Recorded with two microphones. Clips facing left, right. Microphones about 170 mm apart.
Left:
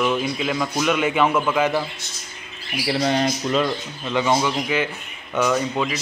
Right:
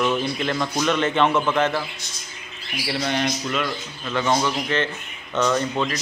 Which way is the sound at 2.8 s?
35° left (ahead or behind).